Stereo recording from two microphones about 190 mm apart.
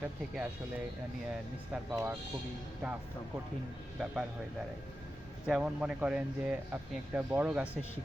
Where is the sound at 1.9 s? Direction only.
10° right (ahead or behind).